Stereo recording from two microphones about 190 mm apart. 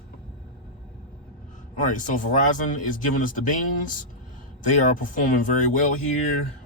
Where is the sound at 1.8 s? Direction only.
45° left (ahead or behind).